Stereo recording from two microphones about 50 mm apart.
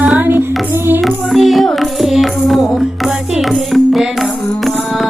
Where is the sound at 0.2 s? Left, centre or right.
Right.